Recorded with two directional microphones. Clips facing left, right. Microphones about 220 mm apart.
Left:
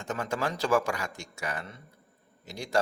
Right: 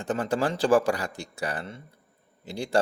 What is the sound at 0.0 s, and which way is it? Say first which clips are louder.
A man's voice: right 5 dB; 35° right (ahead or behind).